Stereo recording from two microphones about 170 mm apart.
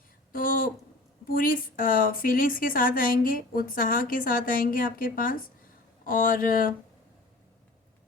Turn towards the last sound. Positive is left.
turn(degrees=55)  # may be behind; listen again after turning